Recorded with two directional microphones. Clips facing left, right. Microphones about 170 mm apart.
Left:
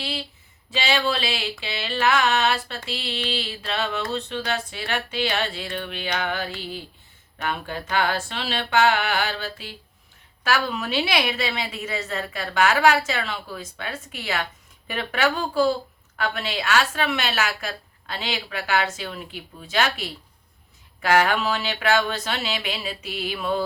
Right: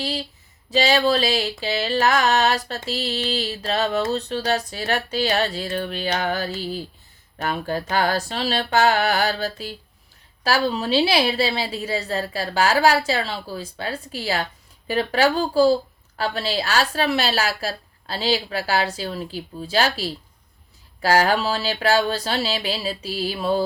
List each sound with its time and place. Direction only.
0.0 s speech: 40° right (ahead or behind)